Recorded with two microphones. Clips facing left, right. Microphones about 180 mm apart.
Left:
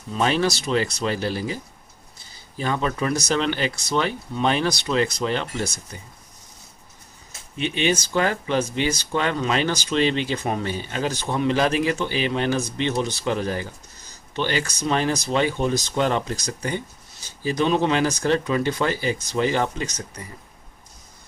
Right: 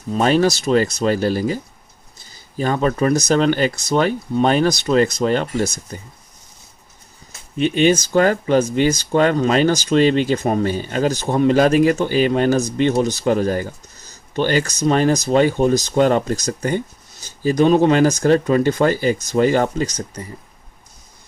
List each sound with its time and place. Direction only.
0.1 s speech: 45° right (ahead or behind)
2.6 s speech: 45° right (ahead or behind)
7.6 s speech: 45° right (ahead or behind)